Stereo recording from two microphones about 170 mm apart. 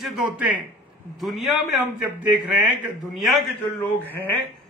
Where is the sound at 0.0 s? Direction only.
Centre (ahead or behind).